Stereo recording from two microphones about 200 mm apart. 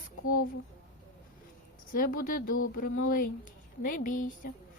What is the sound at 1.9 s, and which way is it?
A woman's voice, 45° left (ahead or behind).